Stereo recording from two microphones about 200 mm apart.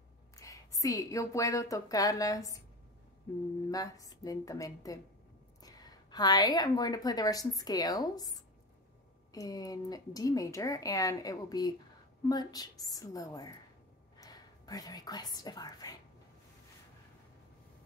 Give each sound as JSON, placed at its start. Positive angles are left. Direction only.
{"t": 0.4, "sound": "a woman's voice", "side_deg": 15}
{"t": 3.7, "sound": "a woman's voice", "side_deg": 15}